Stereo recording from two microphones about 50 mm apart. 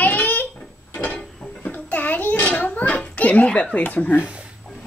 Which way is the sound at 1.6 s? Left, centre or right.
Left.